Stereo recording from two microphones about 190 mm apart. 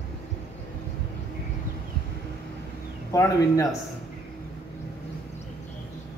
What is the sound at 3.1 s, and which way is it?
Speech, 15° left (ahead or behind).